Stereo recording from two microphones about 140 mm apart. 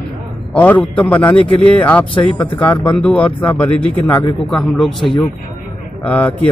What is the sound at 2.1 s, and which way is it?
Speech, 35° left (ahead or behind).